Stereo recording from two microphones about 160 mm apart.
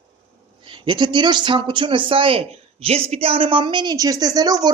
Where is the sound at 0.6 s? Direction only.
30° right (ahead or behind).